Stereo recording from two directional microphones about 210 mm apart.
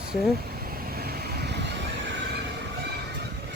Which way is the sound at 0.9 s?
45° right (ahead or behind).